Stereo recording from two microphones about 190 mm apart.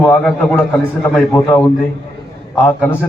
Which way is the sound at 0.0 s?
10° left (ahead or behind).